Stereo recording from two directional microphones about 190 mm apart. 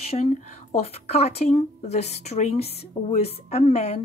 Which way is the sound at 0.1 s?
35° left (ahead or behind).